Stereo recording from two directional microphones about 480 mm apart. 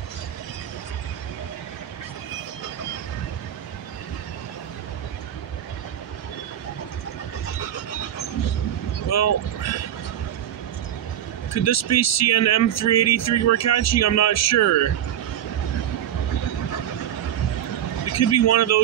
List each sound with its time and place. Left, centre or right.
9.1 s vehicle: left
11.6 s speech: left
18.1 s speech: left